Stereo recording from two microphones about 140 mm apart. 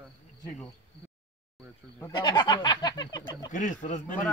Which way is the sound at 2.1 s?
30° left (ahead or behind).